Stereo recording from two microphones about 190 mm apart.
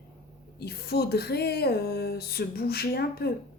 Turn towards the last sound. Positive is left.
turn(degrees=55)  # may be behind; listen again after turning